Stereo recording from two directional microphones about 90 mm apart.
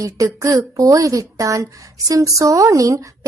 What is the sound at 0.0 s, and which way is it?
A woman's voice, 40° right (ahead or behind).